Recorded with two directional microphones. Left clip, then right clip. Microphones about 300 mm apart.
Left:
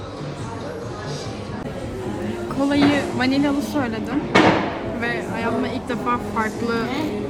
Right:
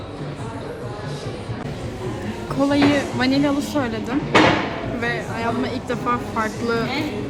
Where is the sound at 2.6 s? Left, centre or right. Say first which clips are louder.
Right 1 dB; centre.